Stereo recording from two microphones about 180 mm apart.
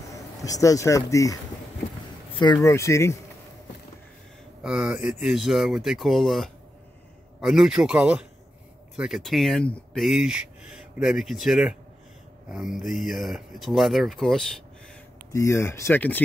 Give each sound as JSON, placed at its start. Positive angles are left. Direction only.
{"t": 0.1, "sound": "speech", "side_deg": 20}
{"t": 4.6, "sound": "speech", "side_deg": -5}
{"t": 15.3, "sound": "speech", "side_deg": 15}